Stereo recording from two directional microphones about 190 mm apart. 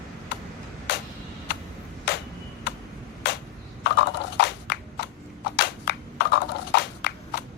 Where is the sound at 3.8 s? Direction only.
65° left (ahead or behind).